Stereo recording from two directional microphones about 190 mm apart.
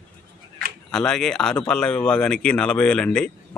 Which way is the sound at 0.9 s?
5° left (ahead or behind).